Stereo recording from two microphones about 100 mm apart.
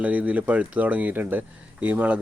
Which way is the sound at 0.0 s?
15° right (ahead or behind).